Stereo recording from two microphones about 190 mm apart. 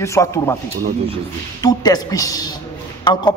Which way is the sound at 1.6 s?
20° left (ahead or behind).